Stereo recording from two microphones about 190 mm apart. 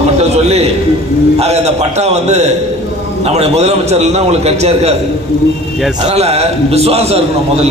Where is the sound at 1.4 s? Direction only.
35° right (ahead or behind).